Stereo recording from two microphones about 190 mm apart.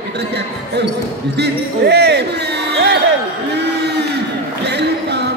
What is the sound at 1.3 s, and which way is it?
Speech, 60° right (ahead or behind).